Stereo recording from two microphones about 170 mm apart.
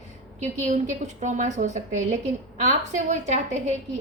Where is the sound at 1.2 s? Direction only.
45° right (ahead or behind).